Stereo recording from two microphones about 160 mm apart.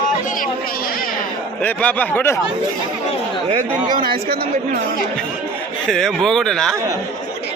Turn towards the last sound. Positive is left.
turn(degrees=5)  # may be behind; listen again after turning